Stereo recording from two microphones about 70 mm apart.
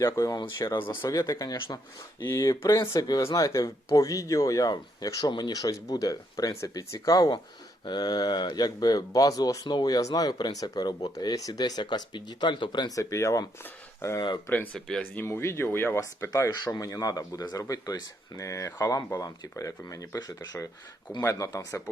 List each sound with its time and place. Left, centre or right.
0.0 s speech: left
0.3 s speech: left
1.0 s speech: left
1.7 s speech: left
2.3 s speech: left
4.7 s speech: left
13.0 s speech: left
14.5 s speech: left
15.1 s speech: left
16.0 s speech: left
16.6 s speech: left
21.2 s speech: left